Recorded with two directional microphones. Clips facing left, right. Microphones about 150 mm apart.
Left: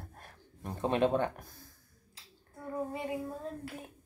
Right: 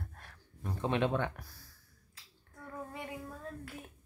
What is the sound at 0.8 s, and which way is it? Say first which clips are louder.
Speech: left 3 dB; 40° left (ahead or behind).